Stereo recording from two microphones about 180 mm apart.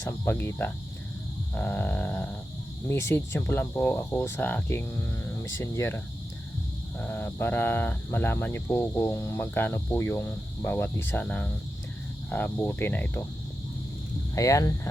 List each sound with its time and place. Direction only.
0.0 s speech: 10° left (ahead or behind)
7.0 s speech: 10° left (ahead or behind)
14.3 s speech: 20° left (ahead or behind)